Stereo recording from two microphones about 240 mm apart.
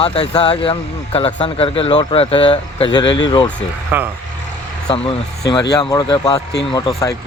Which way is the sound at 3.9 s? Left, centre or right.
Centre.